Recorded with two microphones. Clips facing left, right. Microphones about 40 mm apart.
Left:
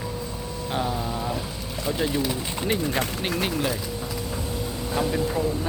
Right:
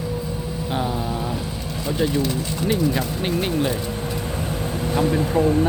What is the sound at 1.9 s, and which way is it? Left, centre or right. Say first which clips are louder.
Speech: right 3 dB; centre.